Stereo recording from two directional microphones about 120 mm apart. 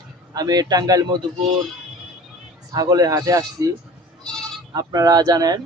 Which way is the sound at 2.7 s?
30° right (ahead or behind).